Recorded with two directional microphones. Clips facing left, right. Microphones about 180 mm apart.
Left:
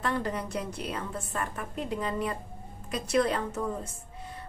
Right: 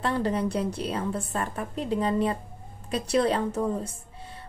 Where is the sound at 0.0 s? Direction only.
30° right (ahead or behind).